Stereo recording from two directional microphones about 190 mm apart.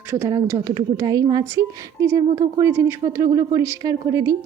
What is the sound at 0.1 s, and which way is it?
A woman's voice, 20° right (ahead or behind).